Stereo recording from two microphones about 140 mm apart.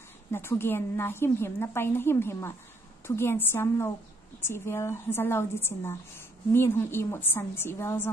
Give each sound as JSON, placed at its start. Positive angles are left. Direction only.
{"t": 0.3, "sound": "a woman's voice", "side_deg": 15}